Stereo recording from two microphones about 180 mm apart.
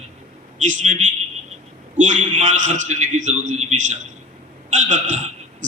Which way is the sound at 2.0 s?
45° right (ahead or behind).